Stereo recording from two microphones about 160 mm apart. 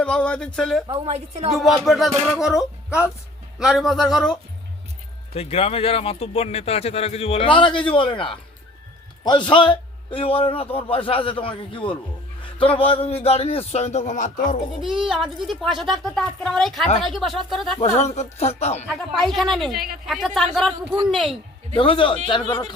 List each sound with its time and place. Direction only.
0.0 s a woman's voice: 5° left (ahead or behind)
0.9 s a woman's voice: 40° right (ahead or behind)
1.5 s a woman's voice: centre (ahead or behind)
5.3 s a man's voice: 35° left (ahead or behind)
15.0 s a woman's voice: centre (ahead or behind)
17.7 s speech: 45° left (ahead or behind)
18.9 s a woman's voice: centre (ahead or behind)
19.7 s speech: 70° right (ahead or behind)
20.1 s a woman's voice: centre (ahead or behind)
21.8 s a man's voice: 35° left (ahead or behind)